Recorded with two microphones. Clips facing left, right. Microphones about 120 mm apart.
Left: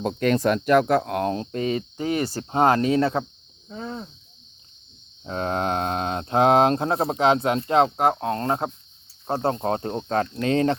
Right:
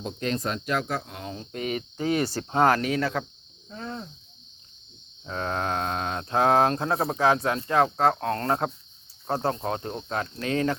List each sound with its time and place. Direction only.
0.0 s speech: 65° left (ahead or behind)
1.5 s speech: 35° left (ahead or behind)
2.5 s speech: 25° left (ahead or behind)
3.7 s cricket: 10° left (ahead or behind)
5.2 s speech: 30° left (ahead or behind)